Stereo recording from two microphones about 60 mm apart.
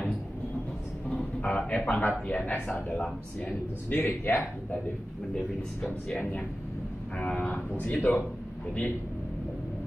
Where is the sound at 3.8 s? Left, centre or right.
Left.